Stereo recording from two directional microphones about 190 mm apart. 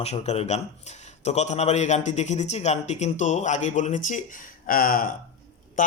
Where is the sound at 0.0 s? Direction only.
35° left (ahead or behind).